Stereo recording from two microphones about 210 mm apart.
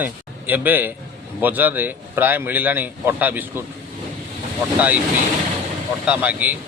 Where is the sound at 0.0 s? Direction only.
10° right (ahead or behind).